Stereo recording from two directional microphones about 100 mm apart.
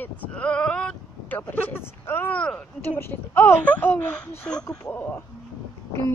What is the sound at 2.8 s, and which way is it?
Speech, 20° left (ahead or behind).